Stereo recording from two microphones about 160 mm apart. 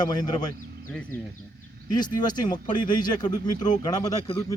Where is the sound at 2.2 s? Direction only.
25° left (ahead or behind).